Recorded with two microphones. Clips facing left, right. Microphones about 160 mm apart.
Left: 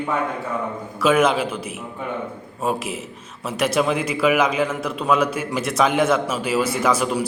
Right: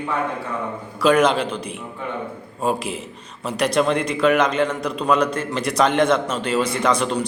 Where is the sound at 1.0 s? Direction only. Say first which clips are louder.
Right 1 dB; 5° left (ahead or behind).